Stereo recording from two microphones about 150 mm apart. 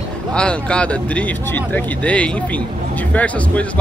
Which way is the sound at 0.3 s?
5° left (ahead or behind).